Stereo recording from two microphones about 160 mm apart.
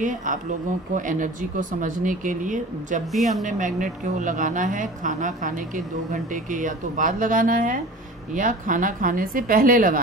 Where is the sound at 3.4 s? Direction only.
50° right (ahead or behind).